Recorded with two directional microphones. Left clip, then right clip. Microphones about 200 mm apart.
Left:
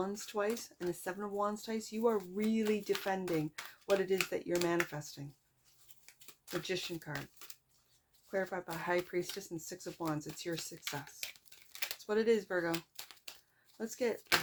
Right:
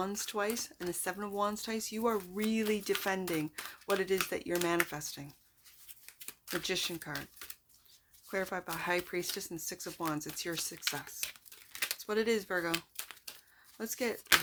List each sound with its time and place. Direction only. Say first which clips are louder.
0.0 s speech: right 1 dB; 15° right (ahead or behind)
6.1 s a sound: right 3 dB; 10° right (ahead or behind)
6.6 s speech: right 3 dB; 20° right (ahead or behind)
11.2 s crumpling: right 3 dB; 10° right (ahead or behind)
13.7 s speech: even; 15° right (ahead or behind)